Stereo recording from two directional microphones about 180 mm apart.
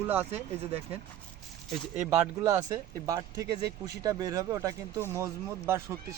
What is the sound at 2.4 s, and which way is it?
Speech, 20° right (ahead or behind).